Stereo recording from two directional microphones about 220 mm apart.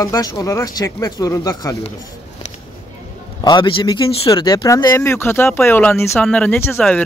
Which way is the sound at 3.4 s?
20° left (ahead or behind).